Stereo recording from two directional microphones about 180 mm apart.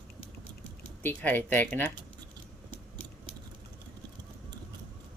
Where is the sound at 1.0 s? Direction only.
10° left (ahead or behind).